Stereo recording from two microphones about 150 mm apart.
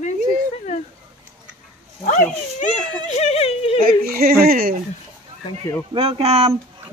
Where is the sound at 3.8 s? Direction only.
75° right (ahead or behind).